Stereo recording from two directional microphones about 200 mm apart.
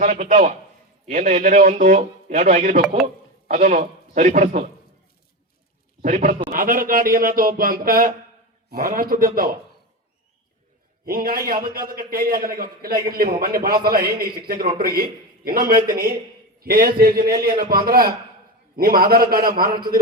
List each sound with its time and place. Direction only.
0.0 s a man's voice: 40° right (ahead or behind)
6.0 s a man's voice: 40° right (ahead or behind)
11.0 s a man's voice: 45° right (ahead or behind)